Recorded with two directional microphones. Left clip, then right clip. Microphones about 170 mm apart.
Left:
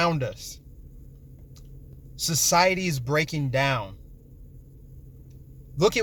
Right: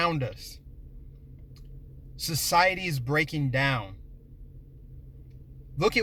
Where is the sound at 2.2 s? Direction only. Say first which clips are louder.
Left 2 dB; 20° left (ahead or behind).